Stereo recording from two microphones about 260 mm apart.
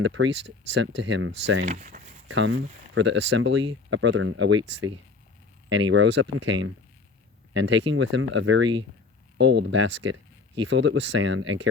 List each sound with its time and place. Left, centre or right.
0.0 s speech: right
1.6 s speech: right
2.2 s speech: right